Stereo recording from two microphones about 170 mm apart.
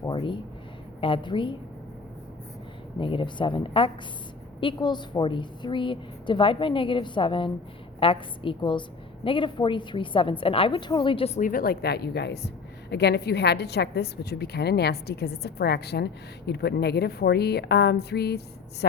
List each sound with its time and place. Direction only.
0.0 s a sound: 30° left (ahead or behind)
1.0 s a woman's voice: 30° left (ahead or behind)
3.0 s a woman's voice: 30° left (ahead or behind)
11.3 s a woman's voice: 55° left (ahead or behind); by 18.9 s 70° left (ahead or behind)